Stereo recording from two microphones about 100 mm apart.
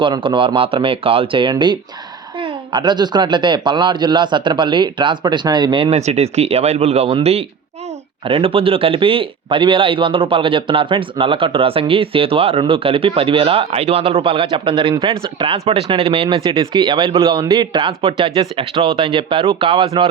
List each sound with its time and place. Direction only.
0.0 s a man's voice: 55° right (ahead or behind); by 7.4 s 90° right
8.2 s a man's voice: 65° right (ahead or behind); by 15.9 s 85° right
16.0 s a man's voice: 75° right (ahead or behind)